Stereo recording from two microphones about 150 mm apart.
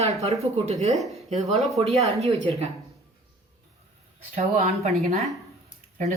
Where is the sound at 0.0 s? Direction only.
45° right (ahead or behind).